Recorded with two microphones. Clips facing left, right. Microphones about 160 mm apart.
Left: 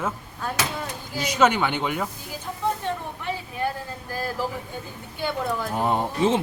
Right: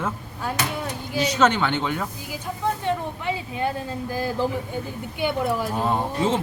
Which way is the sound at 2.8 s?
15° right (ahead or behind).